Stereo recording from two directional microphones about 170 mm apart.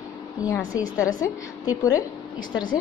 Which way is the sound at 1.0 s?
20° left (ahead or behind).